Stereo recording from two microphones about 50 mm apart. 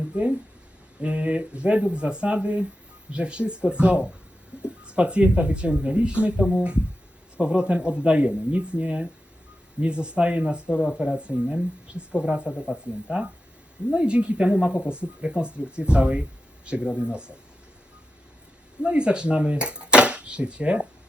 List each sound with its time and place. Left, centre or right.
0.1 s speech: right
4.5 s a sound: right
4.9 s speech: right
6.4 s speech: centre
10.8 s speech: centre
18.8 s speech: right